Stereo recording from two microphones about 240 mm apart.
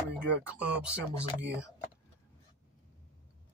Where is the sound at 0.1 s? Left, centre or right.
Centre.